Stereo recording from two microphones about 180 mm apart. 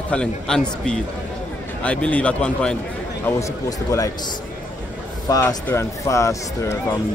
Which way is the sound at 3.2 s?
15° left (ahead or behind).